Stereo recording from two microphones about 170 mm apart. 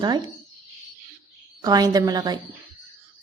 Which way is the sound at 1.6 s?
20° right (ahead or behind).